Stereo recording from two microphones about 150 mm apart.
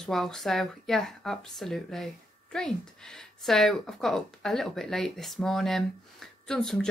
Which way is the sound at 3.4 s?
5° left (ahead or behind).